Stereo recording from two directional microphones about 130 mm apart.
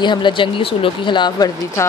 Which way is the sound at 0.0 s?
35° left (ahead or behind).